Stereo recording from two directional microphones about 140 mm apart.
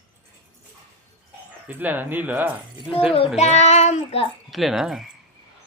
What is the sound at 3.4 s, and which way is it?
Child singing, 55° left (ahead or behind).